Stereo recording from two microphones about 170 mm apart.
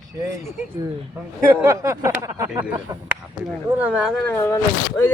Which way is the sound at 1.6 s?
20° right (ahead or behind).